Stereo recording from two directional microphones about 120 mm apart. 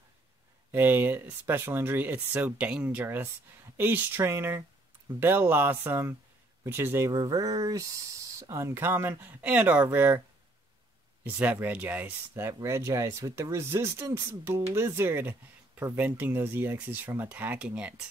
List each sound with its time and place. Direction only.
0.7 s speech: 15° right (ahead or behind)
7.1 s speech: 30° right (ahead or behind)
11.2 s speech: 15° right (ahead or behind)